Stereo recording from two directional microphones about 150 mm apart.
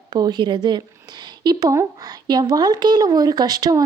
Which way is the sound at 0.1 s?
30° right (ahead or behind).